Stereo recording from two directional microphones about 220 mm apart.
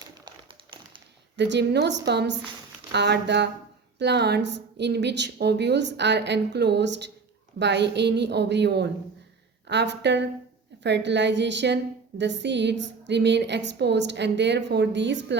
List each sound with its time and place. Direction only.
0.0 s tap: 20° right (ahead or behind)
1.4 s a woman's voice: 50° right (ahead or behind)